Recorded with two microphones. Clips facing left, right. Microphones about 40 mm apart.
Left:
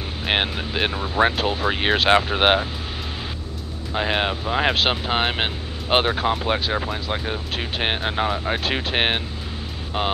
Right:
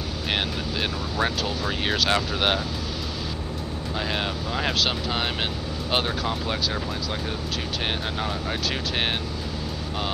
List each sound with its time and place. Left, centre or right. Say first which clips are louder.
0.3 s speech: left 5 dB; left
3.9 s speech: left 6 dB; left